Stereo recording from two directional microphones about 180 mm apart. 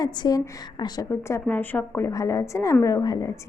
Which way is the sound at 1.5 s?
10° left (ahead or behind).